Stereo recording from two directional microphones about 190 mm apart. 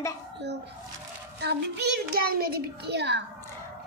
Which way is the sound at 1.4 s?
60° right (ahead or behind).